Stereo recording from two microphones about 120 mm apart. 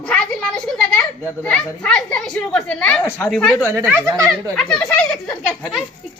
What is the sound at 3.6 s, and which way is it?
Speech, 25° right (ahead or behind).